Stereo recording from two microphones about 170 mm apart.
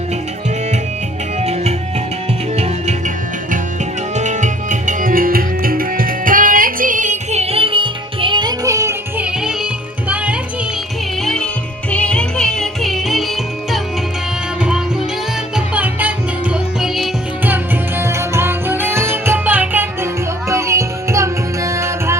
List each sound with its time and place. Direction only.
1.4 s music: 40° right (ahead or behind)
4.1 s music: 45° right (ahead or behind); by 9.2 s 15° right (ahead or behind)
9.2 s music: 5° right (ahead or behind)
11.9 s music: 5° left (ahead or behind)
15.5 s music: 10° right (ahead or behind)